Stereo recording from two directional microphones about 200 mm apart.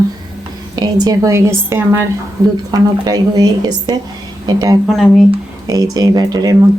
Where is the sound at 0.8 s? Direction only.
20° right (ahead or behind).